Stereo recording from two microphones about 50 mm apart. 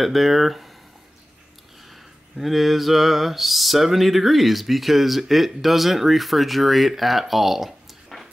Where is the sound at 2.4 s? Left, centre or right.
Centre.